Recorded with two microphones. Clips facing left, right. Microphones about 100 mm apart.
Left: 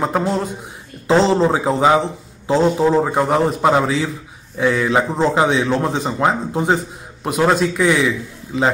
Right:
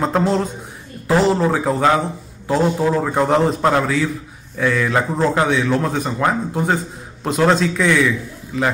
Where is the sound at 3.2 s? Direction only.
10° left (ahead or behind).